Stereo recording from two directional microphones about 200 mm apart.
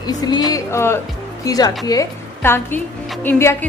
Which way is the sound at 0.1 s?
20° left (ahead or behind).